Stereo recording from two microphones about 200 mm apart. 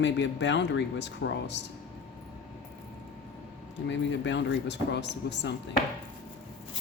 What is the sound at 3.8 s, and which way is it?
Speech, 65° left (ahead or behind).